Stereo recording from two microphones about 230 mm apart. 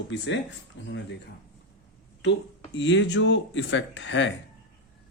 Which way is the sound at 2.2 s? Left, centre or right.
Left.